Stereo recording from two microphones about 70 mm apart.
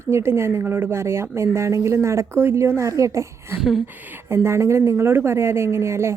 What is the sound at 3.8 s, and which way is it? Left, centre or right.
Speech, right.